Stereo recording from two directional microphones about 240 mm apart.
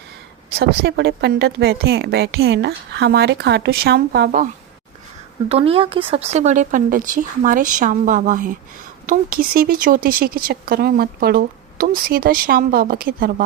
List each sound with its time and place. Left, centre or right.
0.5 s speech: right
5.5 s a woman's voice: right